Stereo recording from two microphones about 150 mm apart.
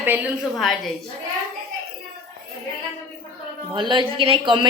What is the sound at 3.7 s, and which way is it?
Speech, 35° right (ahead or behind).